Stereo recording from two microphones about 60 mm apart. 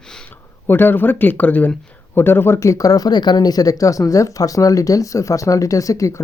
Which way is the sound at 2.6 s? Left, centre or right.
Left.